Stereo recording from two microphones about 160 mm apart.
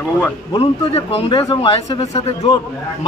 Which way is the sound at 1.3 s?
25° left (ahead or behind).